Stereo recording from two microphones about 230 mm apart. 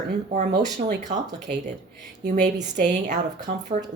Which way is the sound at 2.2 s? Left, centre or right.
Right.